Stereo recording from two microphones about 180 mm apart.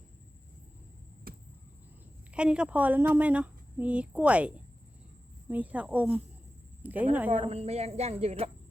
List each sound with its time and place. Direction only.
1.3 s a sound: 55° right (ahead or behind)
2.3 s speech: 5° right (ahead or behind)
7.3 s a woman's voice: 35° right (ahead or behind)